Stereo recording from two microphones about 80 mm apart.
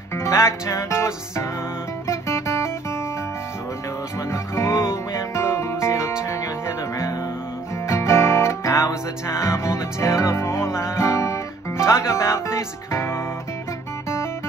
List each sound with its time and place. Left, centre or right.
0.1 s music: left
2.0 s guitar: left
4.3 s music: left
7.8 s music: left